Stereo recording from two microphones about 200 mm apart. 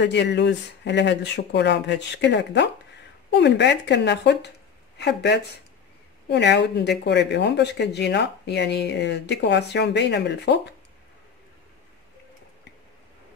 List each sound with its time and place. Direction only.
0.0 s speech: 60° left (ahead or behind)